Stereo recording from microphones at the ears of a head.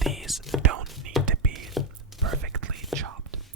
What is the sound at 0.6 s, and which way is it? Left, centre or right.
Whispering, right.